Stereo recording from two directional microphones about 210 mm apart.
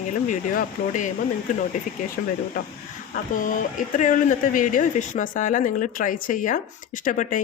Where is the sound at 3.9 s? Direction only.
35° left (ahead or behind).